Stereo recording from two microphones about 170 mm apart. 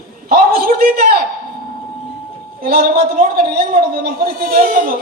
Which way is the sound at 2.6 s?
60° right (ahead or behind).